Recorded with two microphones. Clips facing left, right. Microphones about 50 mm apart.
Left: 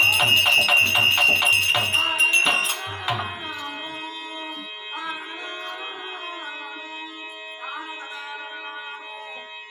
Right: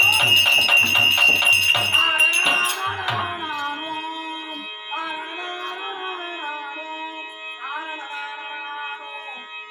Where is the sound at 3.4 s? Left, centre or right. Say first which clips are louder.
Right 5 dB; right.